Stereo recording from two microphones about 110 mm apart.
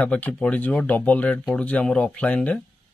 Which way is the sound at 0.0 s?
10° left (ahead or behind).